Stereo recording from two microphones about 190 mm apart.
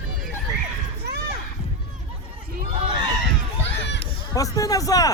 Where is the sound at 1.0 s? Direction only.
55° right (ahead or behind).